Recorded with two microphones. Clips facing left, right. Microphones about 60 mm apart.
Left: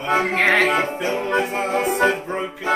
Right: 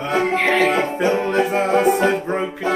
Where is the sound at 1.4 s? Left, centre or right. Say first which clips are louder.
Right 4 dB; right.